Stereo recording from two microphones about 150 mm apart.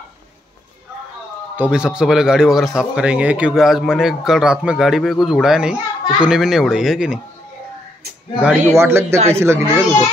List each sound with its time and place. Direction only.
1.6 s speech: 5° right (ahead or behind)
8.4 s a child's voice: 10° right (ahead or behind)